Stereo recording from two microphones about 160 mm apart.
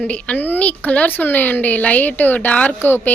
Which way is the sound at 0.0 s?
10° left (ahead or behind).